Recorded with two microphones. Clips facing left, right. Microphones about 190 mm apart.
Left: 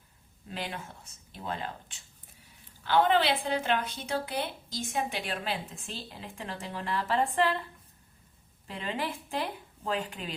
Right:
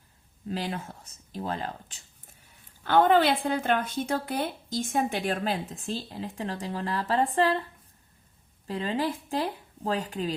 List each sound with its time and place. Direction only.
0.4 s speech: 35° right (ahead or behind)
2.8 s speech: 50° right (ahead or behind); by 7.6 s 35° right (ahead or behind)
8.6 s speech: 35° right (ahead or behind)